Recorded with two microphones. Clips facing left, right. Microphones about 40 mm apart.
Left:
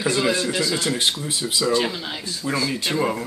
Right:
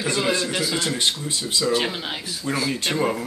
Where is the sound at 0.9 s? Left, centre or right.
Centre.